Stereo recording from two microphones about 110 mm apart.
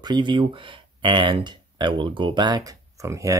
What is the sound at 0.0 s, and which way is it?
Speech, 45° right (ahead or behind).